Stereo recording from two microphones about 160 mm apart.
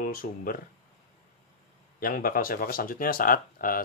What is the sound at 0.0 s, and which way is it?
Speech, 60° left (ahead or behind).